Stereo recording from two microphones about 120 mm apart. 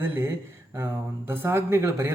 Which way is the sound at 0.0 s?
20° right (ahead or behind).